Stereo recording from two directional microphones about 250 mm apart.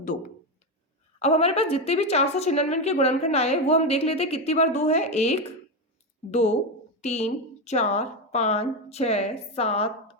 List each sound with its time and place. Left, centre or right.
0.0 s a woman's voice: left